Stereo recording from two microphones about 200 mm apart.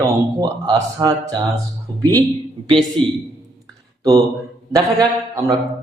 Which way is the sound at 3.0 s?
25° right (ahead or behind).